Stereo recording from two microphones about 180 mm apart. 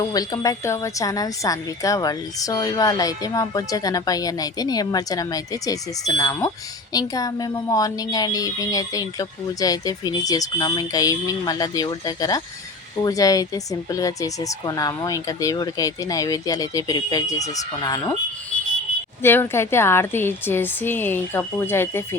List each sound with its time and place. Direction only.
0.0 s a woman's voice: 20° left (ahead or behind)
19.2 s a woman's voice: 10° left (ahead or behind)